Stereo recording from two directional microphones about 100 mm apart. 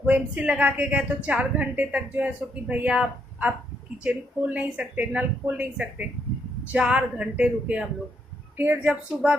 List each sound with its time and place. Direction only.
0.0 s a woman's voice: 10° right (ahead or behind)